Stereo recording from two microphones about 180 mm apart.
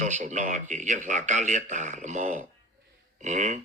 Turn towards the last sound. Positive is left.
turn(degrees=-40)  # may be behind; listen again after turning